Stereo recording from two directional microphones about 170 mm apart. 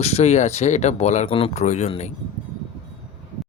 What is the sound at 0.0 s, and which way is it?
Speech, 40° left (ahead or behind).